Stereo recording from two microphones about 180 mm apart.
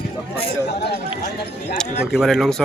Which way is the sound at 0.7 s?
65° left (ahead or behind).